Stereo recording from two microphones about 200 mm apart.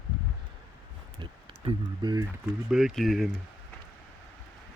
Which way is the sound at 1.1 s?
25° right (ahead or behind).